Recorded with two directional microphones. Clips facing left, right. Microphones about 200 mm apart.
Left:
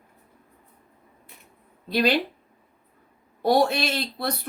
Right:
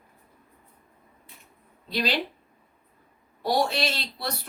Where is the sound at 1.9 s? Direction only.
55° left (ahead or behind).